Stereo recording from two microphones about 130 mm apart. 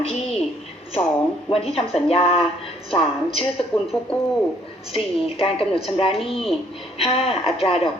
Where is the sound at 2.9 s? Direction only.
45° left (ahead or behind).